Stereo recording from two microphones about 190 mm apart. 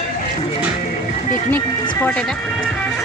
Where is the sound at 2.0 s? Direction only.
5° left (ahead or behind).